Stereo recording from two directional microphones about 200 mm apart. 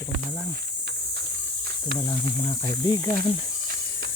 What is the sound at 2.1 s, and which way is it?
Speech, 20° left (ahead or behind).